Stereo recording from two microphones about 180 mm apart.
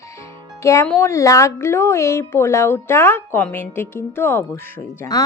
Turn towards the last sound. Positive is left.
turn(degrees=15)  # may be behind; listen again after turning